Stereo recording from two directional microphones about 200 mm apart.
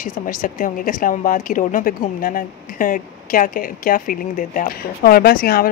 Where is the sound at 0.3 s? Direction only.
40° left (ahead or behind).